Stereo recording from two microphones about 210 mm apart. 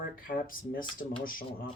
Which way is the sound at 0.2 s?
40° left (ahead or behind).